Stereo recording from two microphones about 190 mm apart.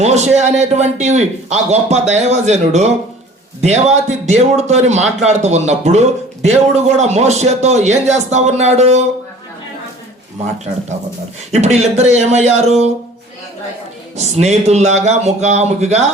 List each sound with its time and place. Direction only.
0.0 s a man's voice: 35° right (ahead or behind)
11.5 s a man's voice: 35° right (ahead or behind)
14.2 s a man's voice: 35° right (ahead or behind)